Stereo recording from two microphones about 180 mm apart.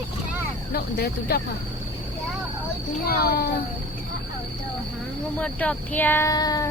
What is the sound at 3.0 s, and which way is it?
Speech, 60° left (ahead or behind).